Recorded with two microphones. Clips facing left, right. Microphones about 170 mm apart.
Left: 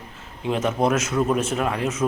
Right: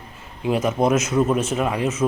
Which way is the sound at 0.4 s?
5° right (ahead or behind).